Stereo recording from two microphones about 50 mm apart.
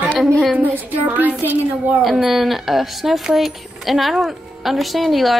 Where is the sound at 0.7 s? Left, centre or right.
Right.